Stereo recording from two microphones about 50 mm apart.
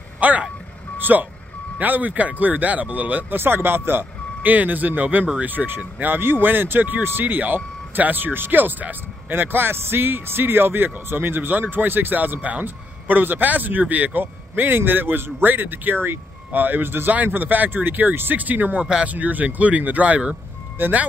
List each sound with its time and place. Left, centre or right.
0.2 s speech: right
3.3 s speech: right
12.6 s speech: right
20.8 s speech: right